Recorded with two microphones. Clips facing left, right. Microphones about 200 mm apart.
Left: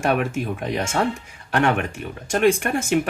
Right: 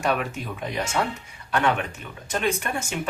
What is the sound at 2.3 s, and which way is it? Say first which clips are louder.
Speech: left 7 dB; 55° left (ahead or behind).